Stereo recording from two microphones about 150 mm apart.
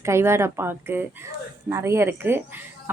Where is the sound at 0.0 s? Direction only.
15° right (ahead or behind).